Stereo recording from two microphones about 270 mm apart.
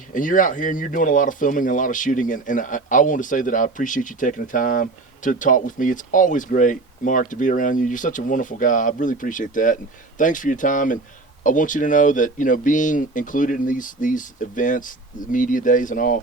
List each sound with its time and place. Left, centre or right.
0.1 s speech: left